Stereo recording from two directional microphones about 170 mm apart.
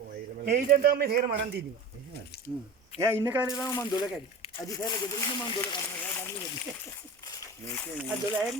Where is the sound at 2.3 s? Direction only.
70° left (ahead or behind).